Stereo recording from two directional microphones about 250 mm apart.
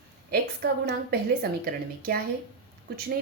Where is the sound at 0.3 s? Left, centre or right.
Right.